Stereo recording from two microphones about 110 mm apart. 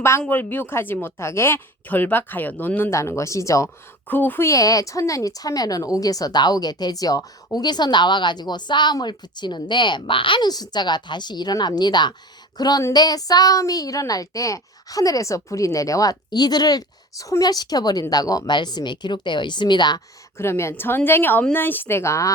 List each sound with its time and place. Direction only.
0.3 s speech: 15° left (ahead or behind)
4.1 s a woman's voice: 15° left (ahead or behind); by 20.0 s 45° left (ahead or behind)
20.4 s speech: 25° left (ahead or behind)